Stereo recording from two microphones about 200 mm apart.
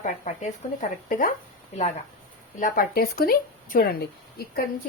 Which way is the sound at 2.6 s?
45° left (ahead or behind).